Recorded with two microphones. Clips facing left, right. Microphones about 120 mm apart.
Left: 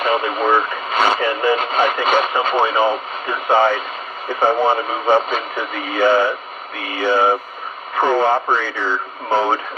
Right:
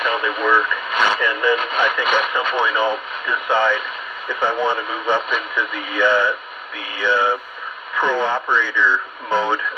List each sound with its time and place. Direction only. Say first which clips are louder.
0.0 s speech: left 3 dB; 35° left (ahead or behind)